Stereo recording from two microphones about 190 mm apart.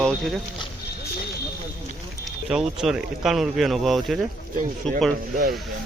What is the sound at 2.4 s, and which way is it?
Speech, 5° right (ahead or behind).